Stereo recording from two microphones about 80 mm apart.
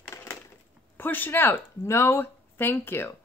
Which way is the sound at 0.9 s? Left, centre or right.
Left.